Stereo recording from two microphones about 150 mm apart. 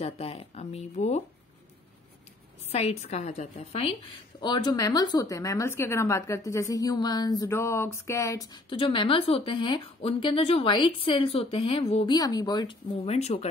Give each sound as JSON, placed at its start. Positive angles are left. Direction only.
{"t": 0.0, "sound": "speech", "side_deg": 40}
{"t": 2.7, "sound": "a woman's voice", "side_deg": 45}
{"t": 4.4, "sound": "a woman's voice", "side_deg": 30}
{"t": 8.7, "sound": "a woman's voice", "side_deg": 35}
{"t": 12.2, "sound": "a woman's voice", "side_deg": 25}